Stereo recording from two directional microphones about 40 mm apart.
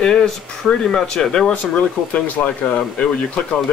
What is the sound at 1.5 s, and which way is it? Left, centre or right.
Speech, left.